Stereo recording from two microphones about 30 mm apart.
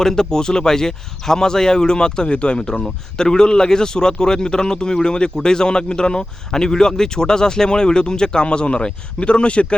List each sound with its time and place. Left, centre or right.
0.0 s speech: centre; by 9.7 s left